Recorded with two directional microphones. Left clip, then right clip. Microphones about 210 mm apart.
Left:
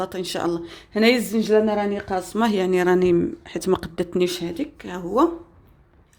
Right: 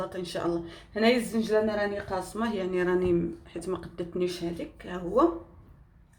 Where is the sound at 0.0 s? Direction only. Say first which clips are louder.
Left 6 dB; 50° left (ahead or behind).